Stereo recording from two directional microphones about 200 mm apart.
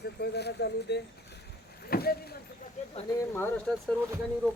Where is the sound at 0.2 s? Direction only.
55° left (ahead or behind).